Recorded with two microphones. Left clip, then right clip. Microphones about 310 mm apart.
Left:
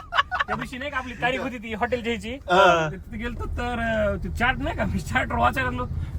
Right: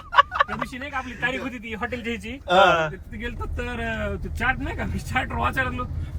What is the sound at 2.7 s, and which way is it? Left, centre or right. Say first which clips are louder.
Speech: even; centre.